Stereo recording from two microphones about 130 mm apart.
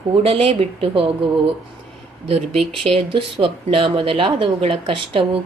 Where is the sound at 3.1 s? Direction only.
40° right (ahead or behind).